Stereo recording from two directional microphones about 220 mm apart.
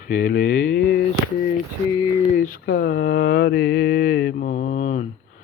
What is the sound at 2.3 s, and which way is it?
Mantra, 40° left (ahead or behind).